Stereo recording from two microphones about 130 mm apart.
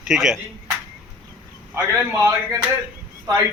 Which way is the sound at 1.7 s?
20° right (ahead or behind).